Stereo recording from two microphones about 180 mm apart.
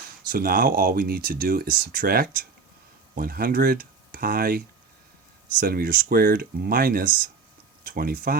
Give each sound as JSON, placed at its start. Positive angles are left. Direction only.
{"t": 0.3, "sound": "speech", "side_deg": -55}